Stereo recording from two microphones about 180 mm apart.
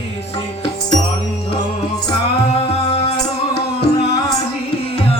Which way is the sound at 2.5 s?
30° left (ahead or behind).